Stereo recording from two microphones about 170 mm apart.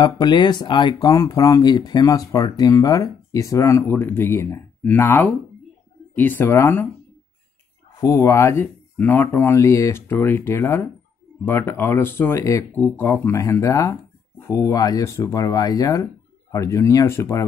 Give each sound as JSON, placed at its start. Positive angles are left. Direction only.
{"t": 0.0, "sound": "speech", "side_deg": 25}
{"t": 8.0, "sound": "speech", "side_deg": 20}